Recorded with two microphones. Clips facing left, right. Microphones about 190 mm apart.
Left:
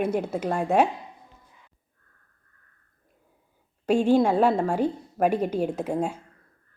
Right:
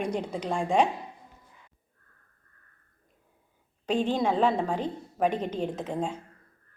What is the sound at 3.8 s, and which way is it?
A woman's voice, 10° left (ahead or behind).